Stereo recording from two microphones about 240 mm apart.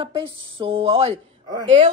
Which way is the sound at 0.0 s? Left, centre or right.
Right.